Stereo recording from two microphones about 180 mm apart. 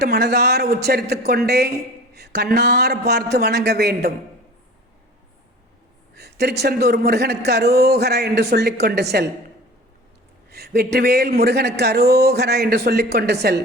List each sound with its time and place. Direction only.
0.0 s a man's voice: 65° right (ahead or behind)
6.1 s a man's voice: 65° right (ahead or behind)
10.5 s a sound: 60° right (ahead or behind)
10.9 s a man's voice: 65° right (ahead or behind)